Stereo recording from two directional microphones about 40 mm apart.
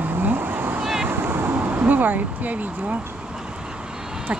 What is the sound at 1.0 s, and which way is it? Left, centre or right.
Vehicle, right.